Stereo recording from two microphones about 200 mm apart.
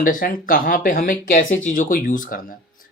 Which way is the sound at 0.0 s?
45° left (ahead or behind).